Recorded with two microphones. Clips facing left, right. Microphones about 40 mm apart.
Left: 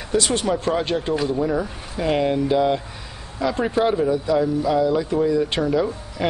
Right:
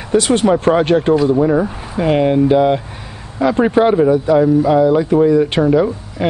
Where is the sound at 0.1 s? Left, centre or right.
Right.